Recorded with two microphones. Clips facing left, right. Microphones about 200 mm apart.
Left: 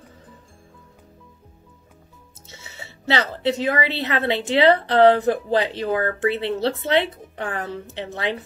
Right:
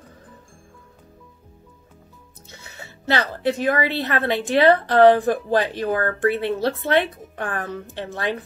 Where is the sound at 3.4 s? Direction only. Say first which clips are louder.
Right 2 dB; 20° left (ahead or behind).